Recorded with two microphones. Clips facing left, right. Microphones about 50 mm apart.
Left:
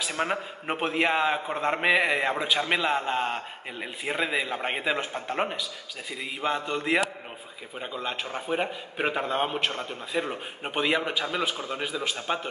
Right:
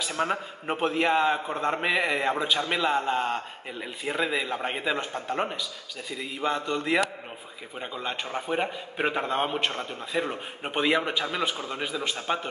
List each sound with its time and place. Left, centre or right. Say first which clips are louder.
0.2 s a man's voice: right 1 dB; centre